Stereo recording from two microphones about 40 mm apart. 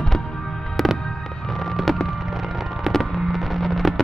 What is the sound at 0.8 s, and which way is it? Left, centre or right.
Music, centre.